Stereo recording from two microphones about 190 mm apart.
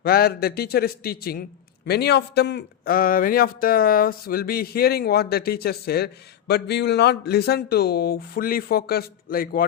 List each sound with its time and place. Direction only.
0.0 s speech: 55° left (ahead or behind)